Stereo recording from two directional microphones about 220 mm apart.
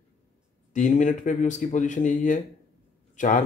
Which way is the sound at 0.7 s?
35° left (ahead or behind).